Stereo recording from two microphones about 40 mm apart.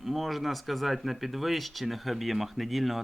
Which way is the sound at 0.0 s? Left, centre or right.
Centre.